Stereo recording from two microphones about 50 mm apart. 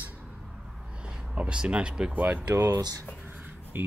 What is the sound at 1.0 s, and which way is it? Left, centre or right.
Speech, right.